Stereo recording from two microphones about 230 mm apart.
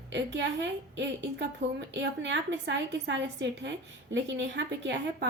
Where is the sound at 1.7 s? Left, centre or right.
Right.